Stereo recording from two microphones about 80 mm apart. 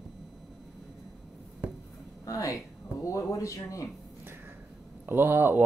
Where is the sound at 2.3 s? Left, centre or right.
Left.